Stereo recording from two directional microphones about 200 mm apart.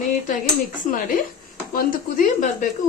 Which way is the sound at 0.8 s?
45° left (ahead or behind).